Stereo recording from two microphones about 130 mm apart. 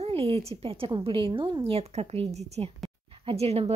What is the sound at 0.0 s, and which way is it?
A woman's voice, 50° right (ahead or behind).